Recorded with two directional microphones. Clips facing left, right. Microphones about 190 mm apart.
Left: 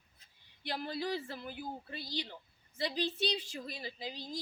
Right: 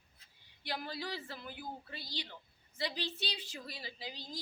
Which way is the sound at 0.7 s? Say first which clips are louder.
Left 4 dB; 20° left (ahead or behind).